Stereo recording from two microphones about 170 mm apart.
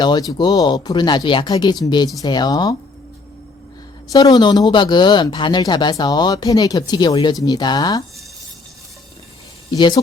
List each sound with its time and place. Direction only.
0.0 s speech: 25° left (ahead or behind)
4.1 s speech: 25° left (ahead or behind)
9.7 s speech: 25° left (ahead or behind)